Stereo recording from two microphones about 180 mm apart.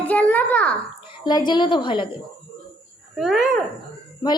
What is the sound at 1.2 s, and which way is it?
Speech, 25° left (ahead or behind).